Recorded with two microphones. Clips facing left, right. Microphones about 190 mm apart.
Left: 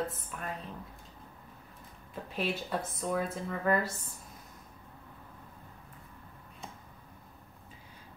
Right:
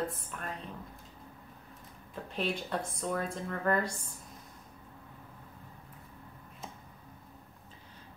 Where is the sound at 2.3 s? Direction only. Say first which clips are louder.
Even; 5° left (ahead or behind).